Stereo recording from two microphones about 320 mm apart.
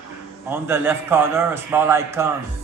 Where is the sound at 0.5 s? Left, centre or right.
Centre.